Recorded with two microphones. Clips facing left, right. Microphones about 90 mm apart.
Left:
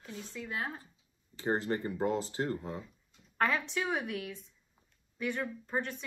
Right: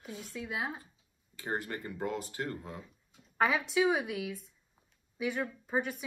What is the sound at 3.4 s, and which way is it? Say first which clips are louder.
A woman's voice: right 3 dB; 10° right (ahead or behind).